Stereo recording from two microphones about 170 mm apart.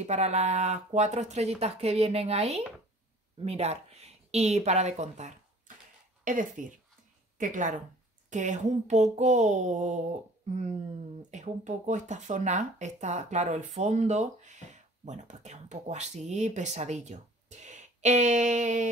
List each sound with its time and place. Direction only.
0.0 s a woman's voice: 40° right (ahead or behind)